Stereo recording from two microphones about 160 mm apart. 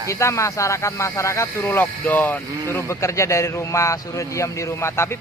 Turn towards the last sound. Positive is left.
turn(degrees=15)  # may be behind; listen again after turning